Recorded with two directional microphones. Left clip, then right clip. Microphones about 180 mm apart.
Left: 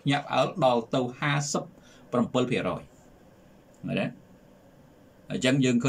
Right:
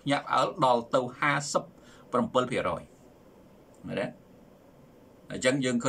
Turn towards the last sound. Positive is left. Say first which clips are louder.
# left 2 dB
turn(degrees=15)  # may be behind; listen again after turning